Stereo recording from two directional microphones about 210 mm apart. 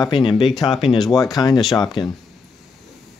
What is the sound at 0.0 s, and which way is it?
Speech, 20° left (ahead or behind).